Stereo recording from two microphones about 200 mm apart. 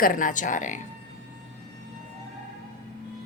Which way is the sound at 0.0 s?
40° left (ahead or behind).